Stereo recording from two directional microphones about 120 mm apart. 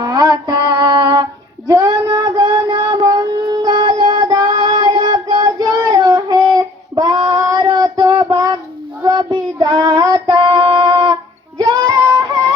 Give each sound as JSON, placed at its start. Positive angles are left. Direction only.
{"t": 0.0, "sound": "music", "side_deg": -30}
{"t": 1.6, "sound": "child singing", "side_deg": -30}
{"t": 10.2, "sound": "female singing", "side_deg": -45}